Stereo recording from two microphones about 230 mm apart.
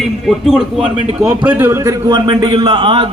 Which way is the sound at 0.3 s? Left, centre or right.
Centre.